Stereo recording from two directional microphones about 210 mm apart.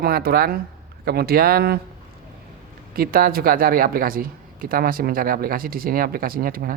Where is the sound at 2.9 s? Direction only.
45° right (ahead or behind).